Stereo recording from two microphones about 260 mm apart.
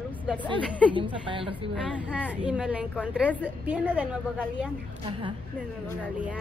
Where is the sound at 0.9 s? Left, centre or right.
Centre.